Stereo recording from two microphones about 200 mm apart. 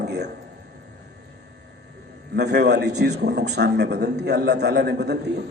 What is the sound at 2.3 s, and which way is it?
A man's voice, 55° right (ahead or behind).